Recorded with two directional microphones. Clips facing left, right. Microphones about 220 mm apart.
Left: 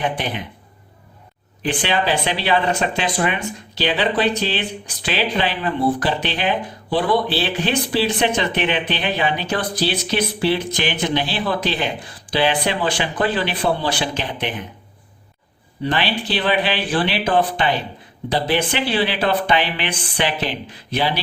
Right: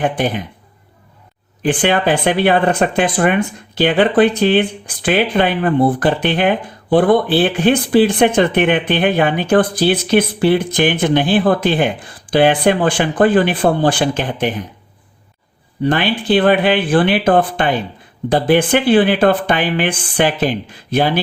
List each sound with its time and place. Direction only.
0.0 s speech: 45° right (ahead or behind)
1.6 s speech: 50° right (ahead or behind)
15.8 s speech: 50° right (ahead or behind)